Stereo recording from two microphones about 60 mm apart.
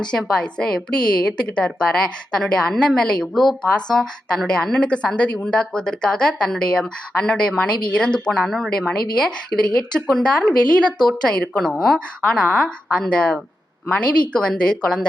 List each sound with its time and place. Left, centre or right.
0.0 s a woman's voice: centre
8.4 s speech: centre
8.9 s a woman's voice: centre
11.9 s a woman's voice: centre